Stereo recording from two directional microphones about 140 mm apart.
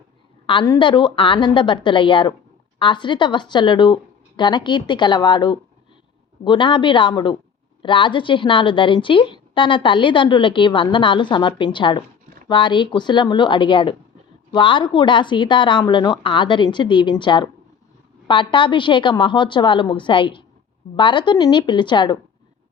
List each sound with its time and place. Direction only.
0.4 s a woman's voice: 30° left (ahead or behind)